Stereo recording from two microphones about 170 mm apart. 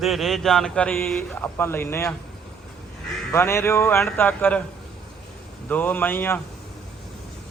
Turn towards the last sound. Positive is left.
turn(degrees=10)  # may be behind; listen again after turning